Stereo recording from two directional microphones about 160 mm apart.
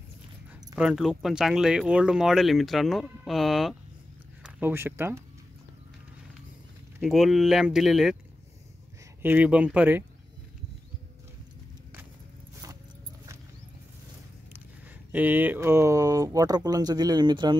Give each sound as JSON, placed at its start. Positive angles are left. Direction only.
{"t": 0.7, "sound": "speech", "side_deg": -5}
{"t": 4.4, "sound": "speech", "side_deg": -10}
{"t": 7.0, "sound": "speech", "side_deg": 0}
{"t": 9.2, "sound": "speech", "side_deg": -10}
{"t": 15.1, "sound": "speech", "side_deg": -10}